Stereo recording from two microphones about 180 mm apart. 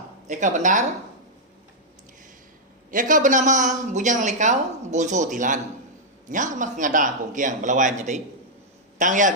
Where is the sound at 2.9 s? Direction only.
45° right (ahead or behind).